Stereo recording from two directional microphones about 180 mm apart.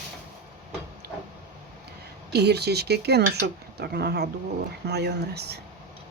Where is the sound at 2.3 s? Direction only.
65° right (ahead or behind).